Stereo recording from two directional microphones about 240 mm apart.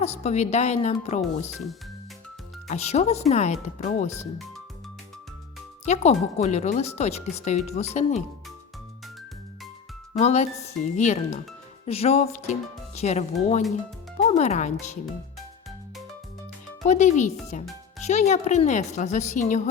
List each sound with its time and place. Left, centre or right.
0.0 s speech: left
2.6 s speech: left
5.8 s speech: left
10.2 s speech: left
16.8 s a child's voice: left